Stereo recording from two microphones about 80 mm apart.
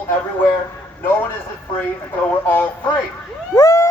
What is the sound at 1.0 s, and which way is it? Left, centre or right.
Speech, left.